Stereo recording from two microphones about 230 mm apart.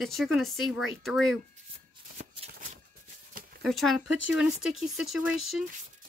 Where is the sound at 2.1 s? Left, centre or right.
Right.